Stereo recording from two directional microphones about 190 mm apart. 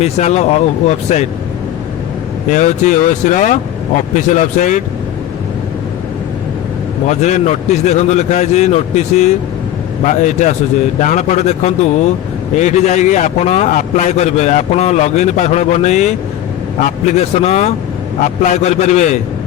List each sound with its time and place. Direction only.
0.0 s a man's voice: 35° left (ahead or behind)
2.5 s a man's voice: 40° left (ahead or behind)
7.1 s a man's voice: 40° left (ahead or behind)